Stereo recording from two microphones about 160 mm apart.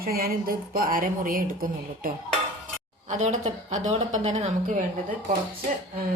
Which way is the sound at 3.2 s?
45° right (ahead or behind).